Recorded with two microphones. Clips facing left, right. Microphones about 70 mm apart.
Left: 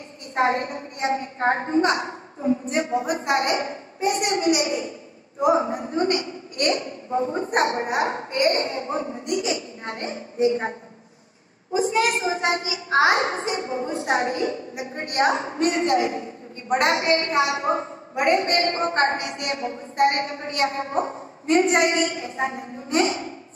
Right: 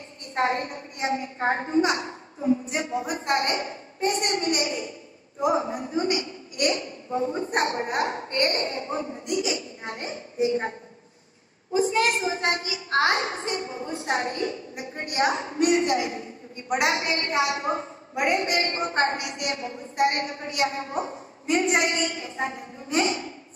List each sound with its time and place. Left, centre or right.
0.3 s a woman's voice: left
12.1 s a woman's voice: left